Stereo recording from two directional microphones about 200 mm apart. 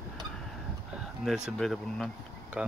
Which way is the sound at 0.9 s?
Centre (ahead or behind).